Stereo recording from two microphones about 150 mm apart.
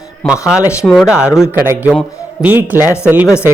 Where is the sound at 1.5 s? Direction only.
15° right (ahead or behind).